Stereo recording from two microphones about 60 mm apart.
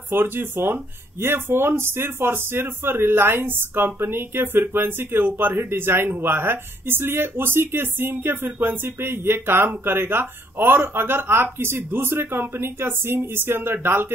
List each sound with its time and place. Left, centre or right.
0.1 s speech: right